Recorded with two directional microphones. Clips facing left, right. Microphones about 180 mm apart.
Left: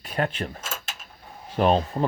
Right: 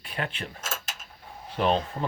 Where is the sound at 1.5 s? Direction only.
45° left (ahead or behind).